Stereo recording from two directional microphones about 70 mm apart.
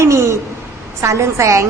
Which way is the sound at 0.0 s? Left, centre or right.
Right.